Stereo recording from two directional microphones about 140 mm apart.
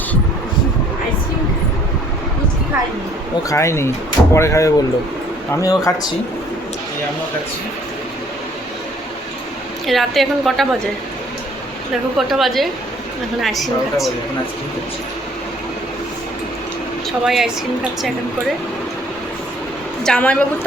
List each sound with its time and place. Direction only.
3.5 s speech: 20° left (ahead or behind)
9.8 s a woman's voice: centre (ahead or behind)
12.1 s a woman's voice: centre (ahead or behind)
17.2 s a woman's voice: centre (ahead or behind)
20.1 s a woman's voice: 10° left (ahead or behind)